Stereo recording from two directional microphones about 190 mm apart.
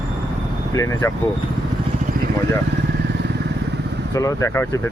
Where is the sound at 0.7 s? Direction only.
15° left (ahead or behind).